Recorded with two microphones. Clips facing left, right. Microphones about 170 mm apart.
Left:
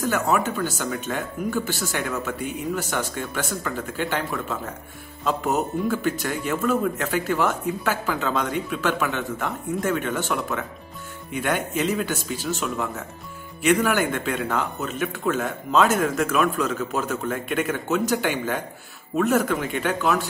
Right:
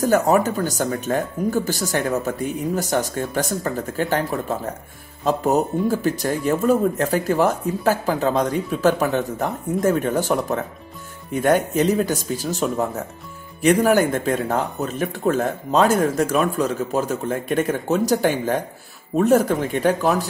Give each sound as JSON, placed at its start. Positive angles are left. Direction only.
{"t": 0.0, "sound": "speech", "side_deg": -40}